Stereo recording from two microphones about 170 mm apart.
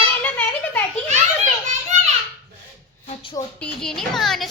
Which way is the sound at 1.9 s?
45° right (ahead or behind).